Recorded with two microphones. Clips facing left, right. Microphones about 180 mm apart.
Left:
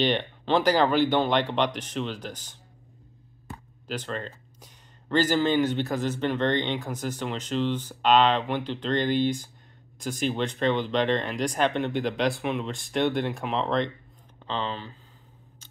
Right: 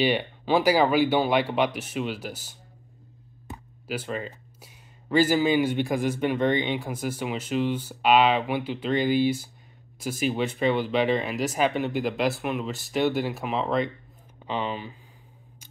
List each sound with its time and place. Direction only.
0.0 s speech: 10° right (ahead or behind)
3.5 s speech: 10° right (ahead or behind)